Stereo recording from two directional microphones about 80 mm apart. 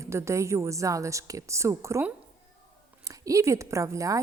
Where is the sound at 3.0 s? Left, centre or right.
Right.